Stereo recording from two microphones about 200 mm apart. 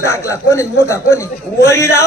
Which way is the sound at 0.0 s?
15° left (ahead or behind).